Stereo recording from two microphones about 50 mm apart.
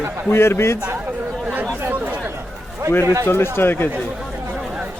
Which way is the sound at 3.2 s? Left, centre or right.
Left.